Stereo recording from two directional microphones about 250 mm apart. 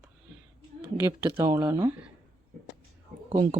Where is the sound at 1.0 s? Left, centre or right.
Centre.